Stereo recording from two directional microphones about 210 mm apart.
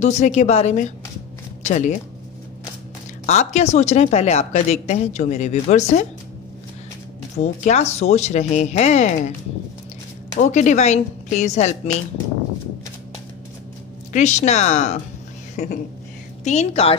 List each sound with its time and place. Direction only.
0.0 s a woman's voice: 30° left (ahead or behind)
3.3 s a woman's voice: 35° left (ahead or behind)
7.3 s a woman's voice: 35° left (ahead or behind)
10.4 s a woman's voice: 35° left (ahead or behind)
14.1 s a woman's voice: 35° left (ahead or behind)